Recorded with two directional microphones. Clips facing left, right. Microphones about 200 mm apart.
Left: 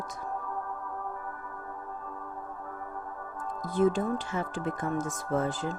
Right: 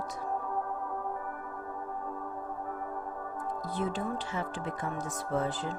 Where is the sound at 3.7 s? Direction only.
45° left (ahead or behind).